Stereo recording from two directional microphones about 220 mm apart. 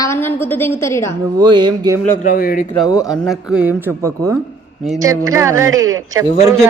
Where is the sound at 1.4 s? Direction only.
20° right (ahead or behind).